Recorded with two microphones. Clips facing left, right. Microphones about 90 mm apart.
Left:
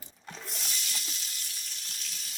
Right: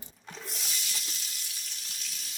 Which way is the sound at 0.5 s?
Centre (ahead or behind).